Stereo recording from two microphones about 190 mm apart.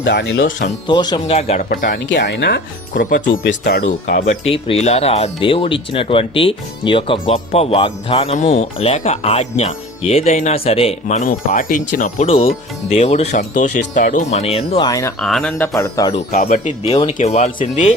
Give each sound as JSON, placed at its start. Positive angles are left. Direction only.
{"t": 0.0, "sound": "speech", "side_deg": 65}
{"t": 0.9, "sound": "speech", "side_deg": 25}
{"t": 1.7, "sound": "speech", "side_deg": 45}
{"t": 2.0, "sound": "speech", "side_deg": 65}
{"t": 3.6, "sound": "speech", "side_deg": 60}
{"t": 3.8, "sound": "speech", "side_deg": 45}
{"t": 4.4, "sound": "speech", "side_deg": 30}
{"t": 12.2, "sound": "speech", "side_deg": 30}
{"t": 14.8, "sound": "speech", "side_deg": 20}
{"t": 15.2, "sound": "speech", "side_deg": 0}
{"t": 16.3, "sound": "speech", "side_deg": 45}